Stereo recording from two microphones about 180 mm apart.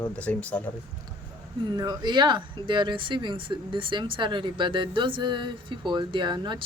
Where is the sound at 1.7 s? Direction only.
25° right (ahead or behind).